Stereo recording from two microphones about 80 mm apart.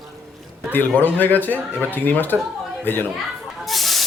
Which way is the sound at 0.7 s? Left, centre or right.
Left.